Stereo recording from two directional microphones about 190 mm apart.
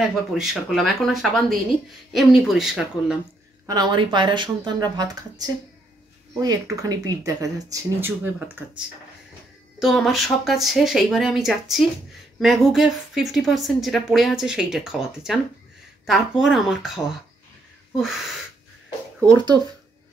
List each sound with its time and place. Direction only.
0.1 s a woman's voice: centre (ahead or behind)
3.6 s speech: 20° right (ahead or behind)
9.8 s a woman's voice: centre (ahead or behind)
19.2 s speech: 20° right (ahead or behind)